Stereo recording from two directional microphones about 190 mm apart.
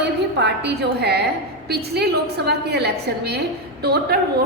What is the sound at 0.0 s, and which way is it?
A woman's voice, 65° right (ahead or behind).